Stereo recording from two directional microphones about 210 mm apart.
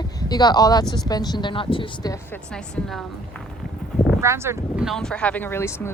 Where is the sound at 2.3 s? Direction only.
5° left (ahead or behind).